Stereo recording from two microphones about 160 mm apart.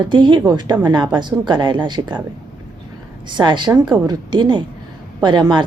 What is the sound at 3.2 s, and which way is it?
A woman's voice, 30° right (ahead or behind).